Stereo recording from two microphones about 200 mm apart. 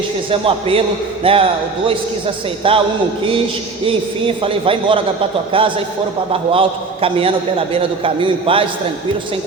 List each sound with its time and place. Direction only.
0.3 s a man's voice: 25° right (ahead or behind)
2.6 s a man's voice: 25° right (ahead or behind)
3.8 s a man's voice: 25° right (ahead or behind)